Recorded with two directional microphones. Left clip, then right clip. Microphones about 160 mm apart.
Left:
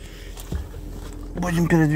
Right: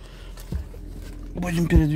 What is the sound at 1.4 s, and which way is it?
Speech, 20° right (ahead or behind).